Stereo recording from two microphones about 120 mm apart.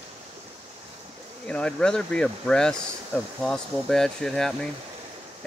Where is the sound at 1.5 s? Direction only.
10° left (ahead or behind).